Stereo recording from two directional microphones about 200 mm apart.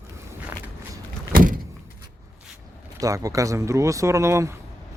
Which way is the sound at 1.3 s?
45° right (ahead or behind).